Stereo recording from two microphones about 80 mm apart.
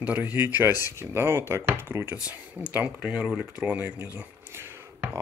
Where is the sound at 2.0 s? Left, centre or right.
Centre.